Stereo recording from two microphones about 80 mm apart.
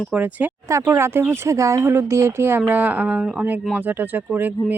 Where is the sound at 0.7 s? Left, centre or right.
Right.